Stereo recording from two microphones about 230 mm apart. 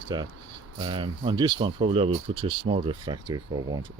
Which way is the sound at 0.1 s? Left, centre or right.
Centre.